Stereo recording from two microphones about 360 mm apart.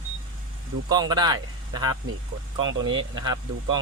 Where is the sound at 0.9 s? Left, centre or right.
Centre.